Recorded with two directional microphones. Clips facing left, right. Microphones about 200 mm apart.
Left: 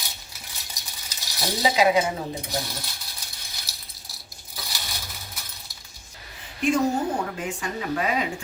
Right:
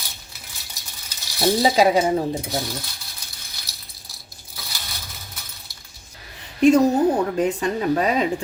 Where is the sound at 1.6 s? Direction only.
35° right (ahead or behind).